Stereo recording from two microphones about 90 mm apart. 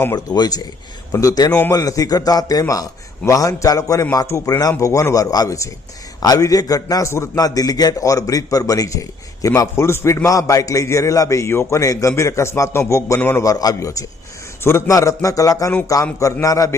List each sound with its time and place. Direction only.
0.3 s a man's voice: 45° left (ahead or behind)
7.3 s a man's voice: 45° left (ahead or behind); by 13.4 s 20° left (ahead or behind)
13.4 s a man's voice: 40° left (ahead or behind)